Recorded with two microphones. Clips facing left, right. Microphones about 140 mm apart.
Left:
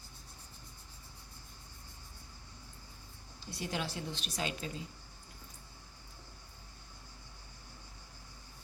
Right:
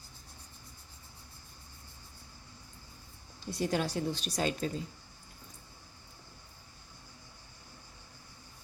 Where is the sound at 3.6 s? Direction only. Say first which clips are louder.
Right 7 dB; 45° right (ahead or behind).